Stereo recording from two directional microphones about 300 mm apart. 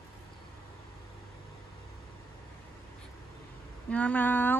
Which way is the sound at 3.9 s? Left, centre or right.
Centre.